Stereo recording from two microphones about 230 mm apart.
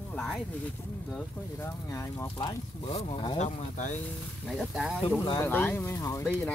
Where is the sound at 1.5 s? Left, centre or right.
Centre; by 4.0 s left.